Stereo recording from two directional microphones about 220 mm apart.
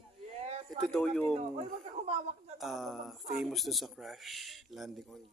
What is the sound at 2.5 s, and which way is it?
Speech, centre (ahead or behind).